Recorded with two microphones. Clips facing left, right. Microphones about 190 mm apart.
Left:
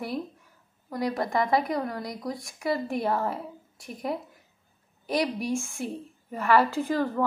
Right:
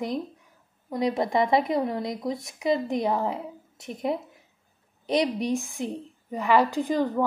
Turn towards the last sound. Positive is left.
turn(degrees=-15)  # may be behind; listen again after turning